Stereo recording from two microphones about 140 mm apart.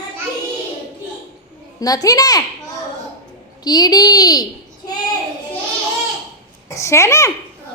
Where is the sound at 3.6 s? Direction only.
30° left (ahead or behind).